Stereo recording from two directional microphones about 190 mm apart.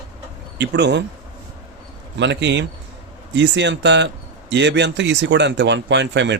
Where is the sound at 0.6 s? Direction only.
65° right (ahead or behind).